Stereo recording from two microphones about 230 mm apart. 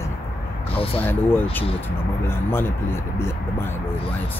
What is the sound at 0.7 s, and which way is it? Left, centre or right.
Speech, left.